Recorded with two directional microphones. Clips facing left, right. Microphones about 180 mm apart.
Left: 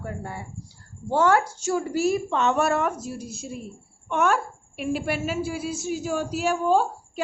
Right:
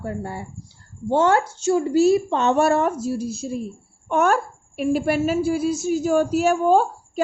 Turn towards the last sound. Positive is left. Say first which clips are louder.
# right 4 dB
turn(degrees=-50)  # may be behind; listen again after turning